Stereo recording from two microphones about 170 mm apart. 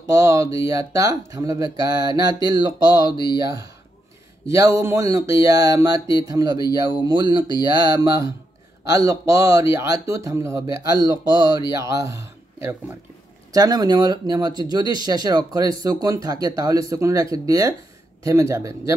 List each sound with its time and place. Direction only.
0.1 s speech: 15° right (ahead or behind)